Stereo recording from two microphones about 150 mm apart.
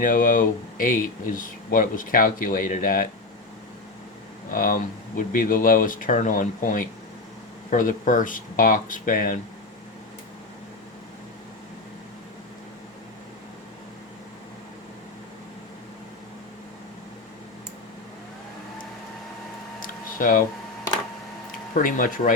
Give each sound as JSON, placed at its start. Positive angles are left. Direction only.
{"t": 0.0, "sound": "speech", "side_deg": 65}
{"t": 4.5, "sound": "speech", "side_deg": 70}
{"t": 19.8, "sound": "a sound", "side_deg": 65}
{"t": 21.8, "sound": "speech", "side_deg": 65}